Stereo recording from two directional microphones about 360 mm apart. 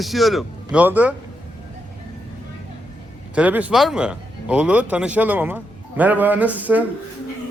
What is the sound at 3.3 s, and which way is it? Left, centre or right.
A man's voice, centre.